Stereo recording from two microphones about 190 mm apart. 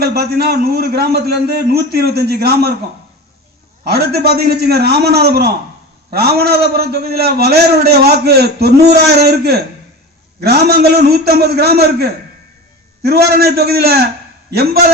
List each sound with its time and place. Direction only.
0.0 s a man's voice: 55° right (ahead or behind)
3.8 s a man's voice: 55° right (ahead or behind)